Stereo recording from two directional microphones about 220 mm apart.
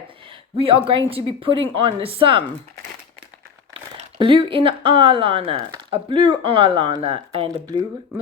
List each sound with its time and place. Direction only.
0.5 s speech: 25° right (ahead or behind)
4.2 s speech: 25° right (ahead or behind)